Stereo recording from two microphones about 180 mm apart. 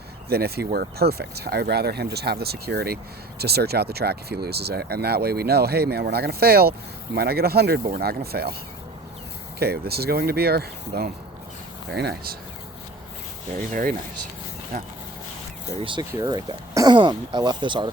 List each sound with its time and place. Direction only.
0.3 s speech: 60° right (ahead or behind)
9.6 s speech: 60° right (ahead or behind)
15.8 s speech: 25° right (ahead or behind)